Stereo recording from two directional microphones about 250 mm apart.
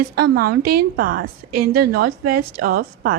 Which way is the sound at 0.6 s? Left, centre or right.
Right.